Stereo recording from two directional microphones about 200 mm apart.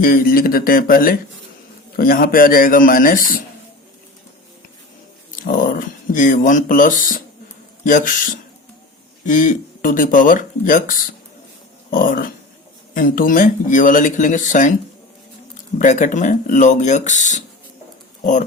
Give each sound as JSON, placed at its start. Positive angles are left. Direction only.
{"t": 0.0, "sound": "speech", "side_deg": 45}
{"t": 5.4, "sound": "speech", "side_deg": 45}
{"t": 15.8, "sound": "speech", "side_deg": 40}